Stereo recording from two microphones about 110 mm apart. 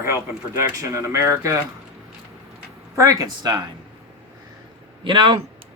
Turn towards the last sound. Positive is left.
turn(degrees=-50)  # may be behind; listen again after turning